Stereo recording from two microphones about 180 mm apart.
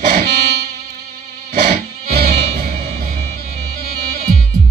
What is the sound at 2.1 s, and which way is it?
Music, 55° right (ahead or behind).